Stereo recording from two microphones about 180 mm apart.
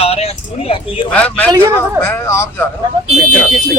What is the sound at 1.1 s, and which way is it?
Speech, 10° left (ahead or behind).